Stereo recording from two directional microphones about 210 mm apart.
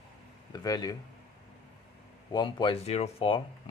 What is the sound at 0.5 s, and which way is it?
Speech, 20° left (ahead or behind).